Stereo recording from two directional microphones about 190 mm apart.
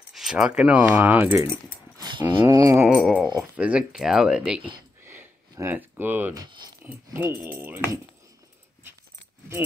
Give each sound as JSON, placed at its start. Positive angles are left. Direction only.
{"t": 0.1, "sound": "speech", "side_deg": 0}
{"t": 2.0, "sound": "a sound", "side_deg": -25}
{"t": 3.0, "sound": "speech", "side_deg": 0}
{"t": 5.0, "sound": "a sound", "side_deg": -10}
{"t": 6.4, "sound": "speech", "side_deg": -20}
{"t": 6.8, "sound": "speech", "side_deg": -10}